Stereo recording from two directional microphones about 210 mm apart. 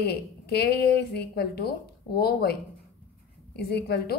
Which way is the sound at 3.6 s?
50° left (ahead or behind).